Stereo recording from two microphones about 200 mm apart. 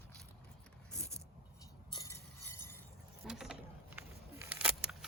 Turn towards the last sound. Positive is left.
turn(degrees=-5)  # may be behind; listen again after turning